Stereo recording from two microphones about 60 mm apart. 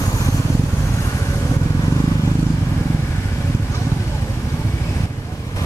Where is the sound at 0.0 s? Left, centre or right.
Left.